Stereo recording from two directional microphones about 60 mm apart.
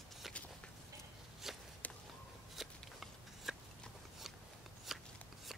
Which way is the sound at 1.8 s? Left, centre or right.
Left.